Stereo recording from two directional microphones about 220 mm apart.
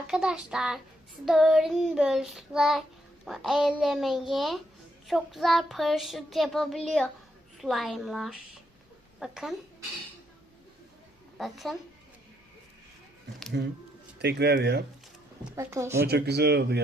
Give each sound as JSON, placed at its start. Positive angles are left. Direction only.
{"t": 0.1, "sound": "child singing", "side_deg": -5}
{"t": 11.3, "sound": "child singing", "side_deg": 0}
{"t": 13.5, "sound": "speech", "side_deg": -50}
{"t": 15.4, "sound": "speech", "side_deg": -15}
{"t": 16.0, "sound": "speech", "side_deg": -50}